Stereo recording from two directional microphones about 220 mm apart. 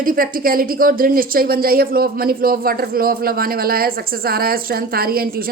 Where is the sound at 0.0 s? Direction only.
40° right (ahead or behind).